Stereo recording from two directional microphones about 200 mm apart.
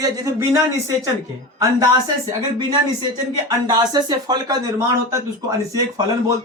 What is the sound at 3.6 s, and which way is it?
Speech, 20° right (ahead or behind).